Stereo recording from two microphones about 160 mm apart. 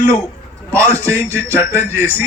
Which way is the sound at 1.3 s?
10° left (ahead or behind).